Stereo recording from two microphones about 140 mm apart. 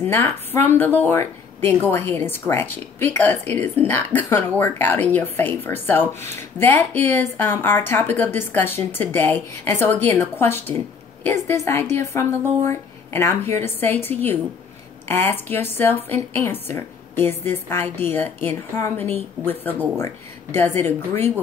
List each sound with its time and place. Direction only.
0.0 s a woman's voice: 15° left (ahead or behind)